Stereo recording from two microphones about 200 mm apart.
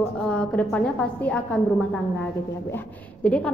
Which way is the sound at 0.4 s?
5° left (ahead or behind).